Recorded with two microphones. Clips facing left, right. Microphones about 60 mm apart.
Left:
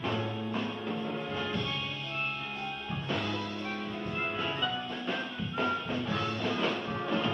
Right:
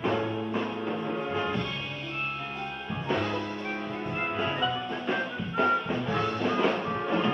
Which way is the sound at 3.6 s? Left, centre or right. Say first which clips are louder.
Right 3 dB; right.